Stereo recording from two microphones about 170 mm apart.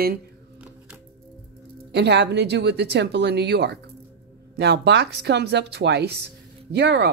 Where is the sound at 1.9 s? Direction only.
85° right.